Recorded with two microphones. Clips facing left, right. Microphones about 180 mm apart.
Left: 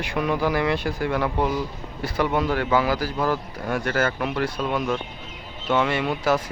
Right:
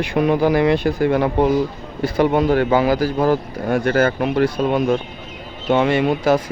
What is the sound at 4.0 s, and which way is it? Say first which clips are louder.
Speech: right 7 dB; 30° right (ahead or behind).